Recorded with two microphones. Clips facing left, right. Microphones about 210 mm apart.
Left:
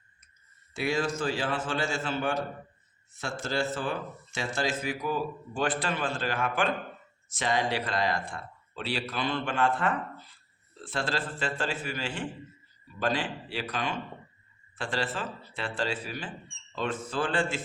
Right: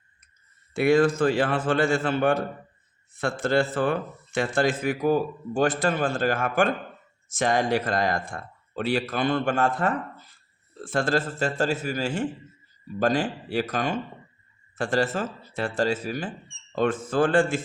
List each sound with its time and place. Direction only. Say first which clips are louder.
0.7 s a man's voice: right 10 dB; 55° right (ahead or behind)